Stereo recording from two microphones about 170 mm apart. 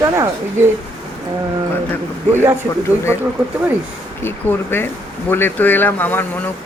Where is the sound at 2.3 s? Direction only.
15° right (ahead or behind).